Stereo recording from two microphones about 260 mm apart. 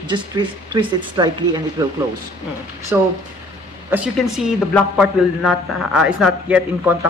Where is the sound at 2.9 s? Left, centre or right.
Centre.